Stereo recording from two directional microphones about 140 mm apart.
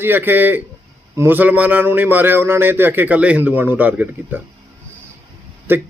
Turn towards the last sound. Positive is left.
turn(degrees=-15)  # may be behind; listen again after turning